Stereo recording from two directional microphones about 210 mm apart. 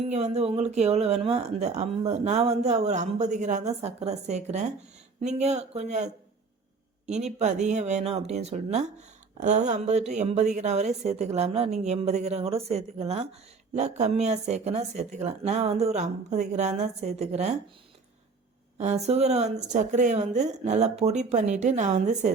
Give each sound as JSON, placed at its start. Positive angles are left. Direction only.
{"t": 0.0, "sound": "speech", "side_deg": -30}
{"t": 7.1, "sound": "speech", "side_deg": -30}
{"t": 18.8, "sound": "speech", "side_deg": -30}